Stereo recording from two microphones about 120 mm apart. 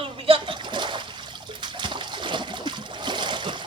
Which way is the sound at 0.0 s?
50° right (ahead or behind).